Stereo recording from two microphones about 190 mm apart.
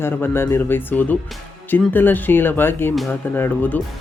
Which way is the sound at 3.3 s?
10° left (ahead or behind).